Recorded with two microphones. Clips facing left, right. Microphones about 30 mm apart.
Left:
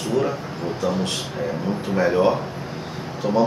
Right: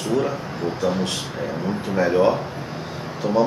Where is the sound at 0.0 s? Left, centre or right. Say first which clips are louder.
Even; centre.